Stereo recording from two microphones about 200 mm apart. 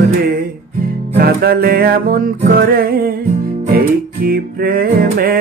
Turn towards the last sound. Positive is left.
turn(degrees=-45)  # may be behind; listen again after turning